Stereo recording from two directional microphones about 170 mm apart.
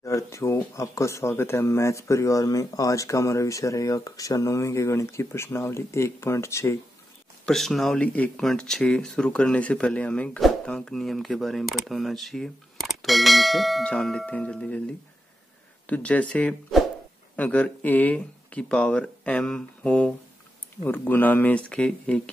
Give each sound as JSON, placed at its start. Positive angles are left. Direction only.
{"t": 0.0, "sound": "speech", "side_deg": 15}
{"t": 7.4, "sound": "speech", "side_deg": 0}
{"t": 15.9, "sound": "speech", "side_deg": 10}